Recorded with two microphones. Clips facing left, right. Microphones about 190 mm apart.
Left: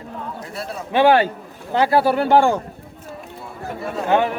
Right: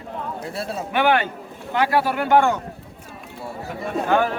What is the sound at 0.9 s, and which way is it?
Speech, 30° left (ahead or behind).